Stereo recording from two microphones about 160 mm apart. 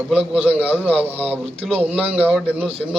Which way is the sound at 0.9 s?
40° right (ahead or behind).